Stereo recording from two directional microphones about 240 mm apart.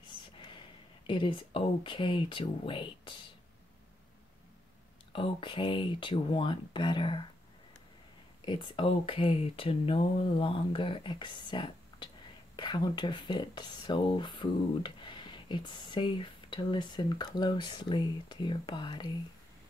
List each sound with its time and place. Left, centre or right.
0.0 s speech: centre
5.1 s speech: left
8.5 s speech: centre